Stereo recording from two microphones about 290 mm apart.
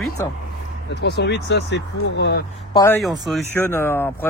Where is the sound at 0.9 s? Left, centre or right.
Left.